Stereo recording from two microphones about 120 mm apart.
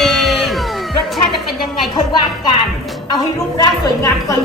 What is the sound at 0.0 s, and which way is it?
Music, centre (ahead or behind).